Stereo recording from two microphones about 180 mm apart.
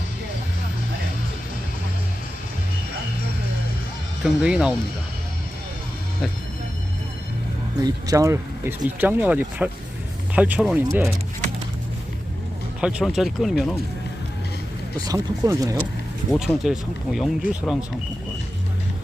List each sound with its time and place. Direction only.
4.2 s speech: 5° right (ahead or behind)
7.8 s speech: 20° right (ahead or behind)
12.8 s speech: 5° right (ahead or behind)
14.9 s speech: 20° right (ahead or behind)
16.4 s speech: centre (ahead or behind)